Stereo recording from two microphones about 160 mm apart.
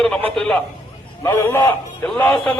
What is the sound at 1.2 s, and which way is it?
A man's voice, 15° left (ahead or behind).